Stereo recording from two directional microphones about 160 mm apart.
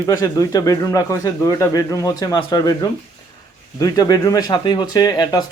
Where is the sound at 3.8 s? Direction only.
25° left (ahead or behind).